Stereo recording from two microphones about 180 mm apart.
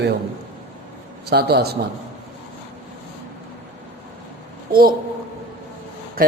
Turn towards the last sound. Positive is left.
turn(degrees=-55)  # may be behind; listen again after turning